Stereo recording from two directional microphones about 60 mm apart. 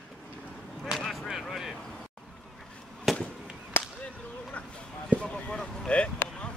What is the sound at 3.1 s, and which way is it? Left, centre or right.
Fireworks, centre.